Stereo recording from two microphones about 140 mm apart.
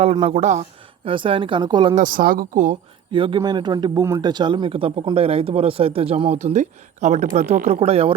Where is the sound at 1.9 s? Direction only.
85° right; by 2.8 s 65° right (ahead or behind).